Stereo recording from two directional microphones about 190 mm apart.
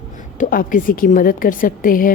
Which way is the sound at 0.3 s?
45° left (ahead or behind).